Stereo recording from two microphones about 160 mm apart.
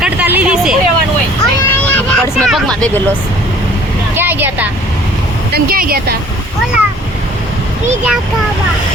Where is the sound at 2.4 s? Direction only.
5° left (ahead or behind).